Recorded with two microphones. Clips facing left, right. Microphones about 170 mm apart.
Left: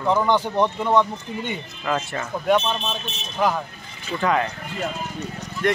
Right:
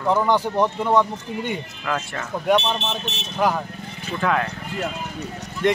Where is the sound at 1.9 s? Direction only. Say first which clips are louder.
Left 2 dB; 5° left (ahead or behind).